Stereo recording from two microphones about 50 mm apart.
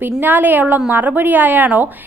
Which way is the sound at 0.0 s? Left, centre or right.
Right.